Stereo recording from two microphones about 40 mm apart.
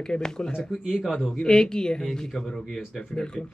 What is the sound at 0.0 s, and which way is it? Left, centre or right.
Speech, centre.